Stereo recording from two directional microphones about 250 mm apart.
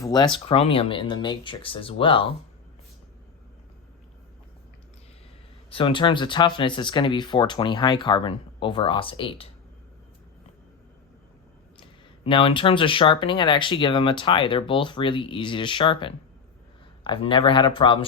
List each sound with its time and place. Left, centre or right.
0.0 s speech: centre
5.7 s speech: left
11.8 s speech: left